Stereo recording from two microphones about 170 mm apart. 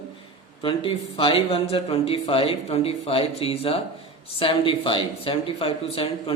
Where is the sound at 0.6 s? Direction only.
30° left (ahead or behind).